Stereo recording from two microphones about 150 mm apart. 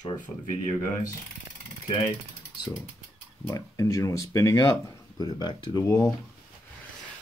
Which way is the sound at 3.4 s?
20° left (ahead or behind).